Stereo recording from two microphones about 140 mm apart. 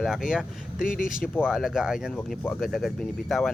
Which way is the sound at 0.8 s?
75° left (ahead or behind).